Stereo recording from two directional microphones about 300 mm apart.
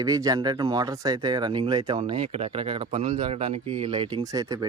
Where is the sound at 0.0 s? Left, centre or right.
Centre.